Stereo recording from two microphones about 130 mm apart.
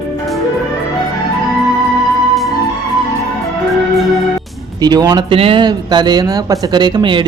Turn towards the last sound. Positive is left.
turn(degrees=-40)  # may be behind; listen again after turning